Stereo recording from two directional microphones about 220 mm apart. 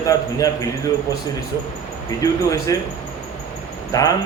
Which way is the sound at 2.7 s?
15° left (ahead or behind).